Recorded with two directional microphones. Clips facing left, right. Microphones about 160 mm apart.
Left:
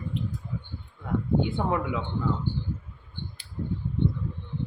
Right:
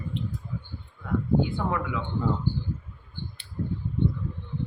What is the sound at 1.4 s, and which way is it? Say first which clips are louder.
Speech: left 1 dB; 20° left (ahead or behind).